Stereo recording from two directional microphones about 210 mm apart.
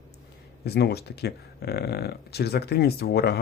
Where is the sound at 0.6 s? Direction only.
50° left (ahead or behind).